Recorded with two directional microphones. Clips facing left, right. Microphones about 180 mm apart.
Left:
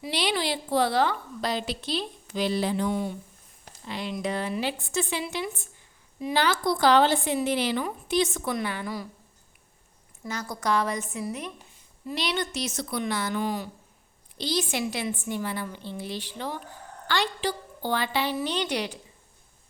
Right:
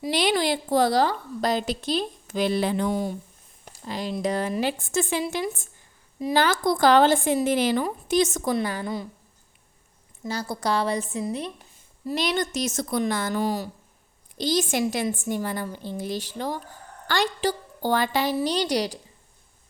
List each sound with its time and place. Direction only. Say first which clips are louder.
0.0 s a woman's voice: right 5 dB; 50° right (ahead or behind)
2.9 s a woman's voice: right 2 dB; 40° right (ahead or behind)
10.2 s a woman's voice: right 2 dB; 30° right (ahead or behind)
12.0 s a woman's voice: right 4 dB; 45° right (ahead or behind)